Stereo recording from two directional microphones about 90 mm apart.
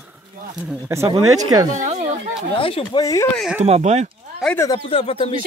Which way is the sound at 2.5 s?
85° left.